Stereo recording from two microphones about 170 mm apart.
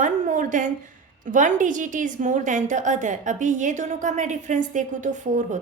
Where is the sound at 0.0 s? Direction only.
50° right (ahead or behind).